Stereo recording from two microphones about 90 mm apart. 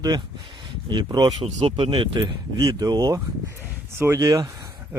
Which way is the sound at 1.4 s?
80° right.